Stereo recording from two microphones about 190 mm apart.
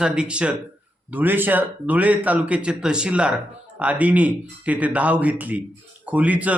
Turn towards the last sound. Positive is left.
turn(degrees=-10)  # may be behind; listen again after turning